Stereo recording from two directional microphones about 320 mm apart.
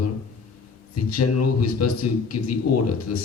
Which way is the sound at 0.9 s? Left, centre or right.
Left.